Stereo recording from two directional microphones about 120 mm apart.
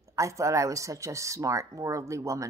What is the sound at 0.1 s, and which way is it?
A woman's voice, 25° right (ahead or behind).